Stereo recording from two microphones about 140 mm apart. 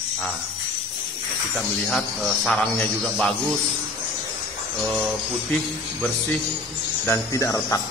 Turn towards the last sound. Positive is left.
turn(degrees=25)  # may be behind; listen again after turning